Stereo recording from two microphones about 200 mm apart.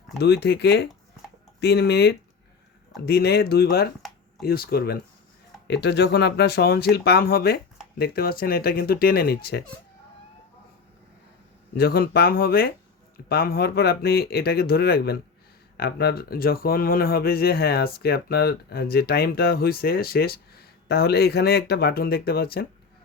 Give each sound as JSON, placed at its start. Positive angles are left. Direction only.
{"t": 0.2, "sound": "speech", "side_deg": 55}
{"t": 11.8, "sound": "speech", "side_deg": 50}